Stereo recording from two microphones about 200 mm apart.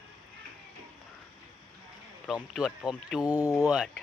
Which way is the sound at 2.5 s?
Centre (ahead or behind).